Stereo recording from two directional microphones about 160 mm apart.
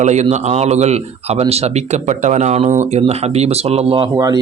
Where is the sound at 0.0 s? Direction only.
45° right (ahead or behind).